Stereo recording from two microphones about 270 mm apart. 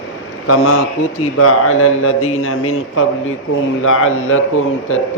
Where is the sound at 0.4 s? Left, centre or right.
Left.